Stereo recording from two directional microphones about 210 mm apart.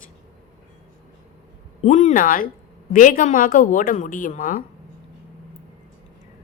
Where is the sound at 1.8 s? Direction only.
35° left (ahead or behind).